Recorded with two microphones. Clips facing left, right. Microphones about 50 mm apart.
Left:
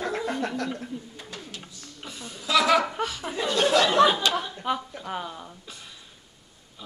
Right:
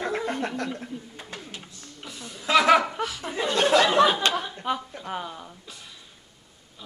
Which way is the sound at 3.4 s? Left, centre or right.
Right.